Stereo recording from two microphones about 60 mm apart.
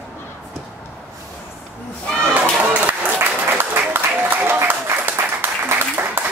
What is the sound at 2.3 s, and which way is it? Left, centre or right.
Applause, right.